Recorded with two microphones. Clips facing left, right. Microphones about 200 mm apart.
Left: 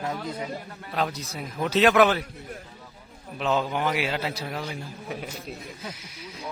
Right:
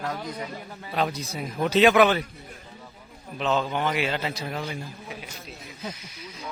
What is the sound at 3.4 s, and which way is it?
A man's voice, 10° left (ahead or behind).